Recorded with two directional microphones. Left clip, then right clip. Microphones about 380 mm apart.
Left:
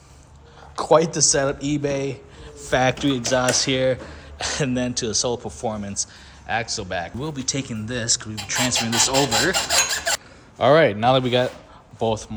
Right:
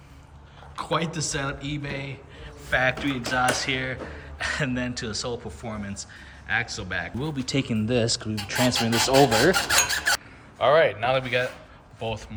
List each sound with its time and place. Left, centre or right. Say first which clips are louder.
0.8 s speech: left 10 dB; centre
10.6 s speech: left 4 dB; centre